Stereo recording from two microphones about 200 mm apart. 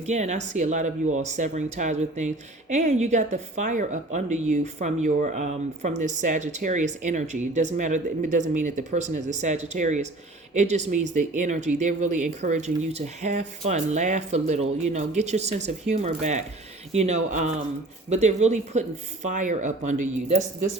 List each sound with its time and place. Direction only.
0.0 s speech: 35° right (ahead or behind)